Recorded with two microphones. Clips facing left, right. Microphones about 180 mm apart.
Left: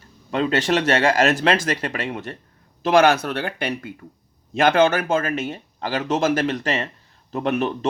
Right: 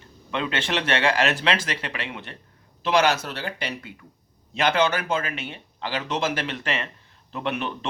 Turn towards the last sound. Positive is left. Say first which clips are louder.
# left 6 dB
turn(degrees=45)  # may be behind; listen again after turning